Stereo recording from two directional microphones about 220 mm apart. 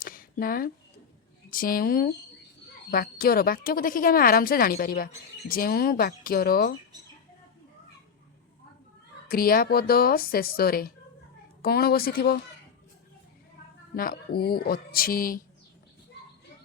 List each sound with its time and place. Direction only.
0.0 s a sound: 40° left (ahead or behind)
1.5 s speech: 40° left (ahead or behind)
9.3 s speech: 40° left (ahead or behind)
13.9 s speech: 40° left (ahead or behind)